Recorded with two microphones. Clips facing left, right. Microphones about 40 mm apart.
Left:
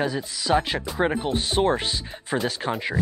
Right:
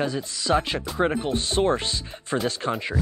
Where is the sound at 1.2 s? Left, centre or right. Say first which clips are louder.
Even; centre.